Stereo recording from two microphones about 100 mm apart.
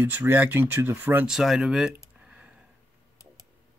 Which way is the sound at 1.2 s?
5° right (ahead or behind).